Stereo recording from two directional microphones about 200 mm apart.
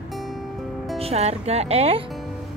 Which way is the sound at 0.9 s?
30° right (ahead or behind).